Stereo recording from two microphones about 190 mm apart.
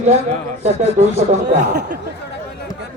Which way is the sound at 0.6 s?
35° right (ahead or behind).